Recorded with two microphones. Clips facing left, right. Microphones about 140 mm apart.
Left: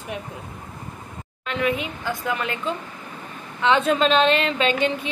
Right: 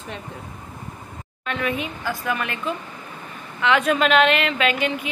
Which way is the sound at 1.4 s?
15° left (ahead or behind).